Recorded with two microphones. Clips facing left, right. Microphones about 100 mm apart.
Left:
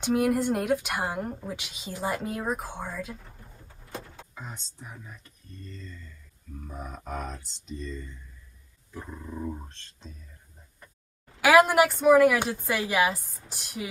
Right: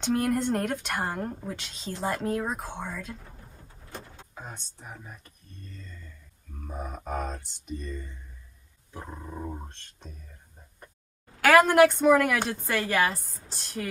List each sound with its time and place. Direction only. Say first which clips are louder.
0.0 s a woman's voice: left 2 dB; 5° left (ahead or behind)
4.4 s speech: even; 55° right (ahead or behind)
5.7 s speech: left 3 dB; 10° right (ahead or behind)
9.1 s dog: left 2 dB; 30° right (ahead or behind)
11.4 s a woman's voice: right 1 dB; 10° left (ahead or behind)